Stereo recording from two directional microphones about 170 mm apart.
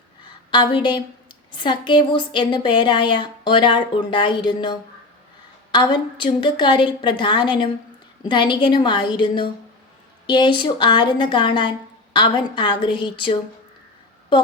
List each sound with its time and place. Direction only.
0.5 s a woman's voice: 30° left (ahead or behind)
5.7 s a woman's voice: 25° left (ahead or behind)